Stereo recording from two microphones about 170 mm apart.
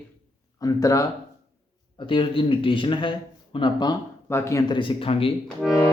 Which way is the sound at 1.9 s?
30° left (ahead or behind).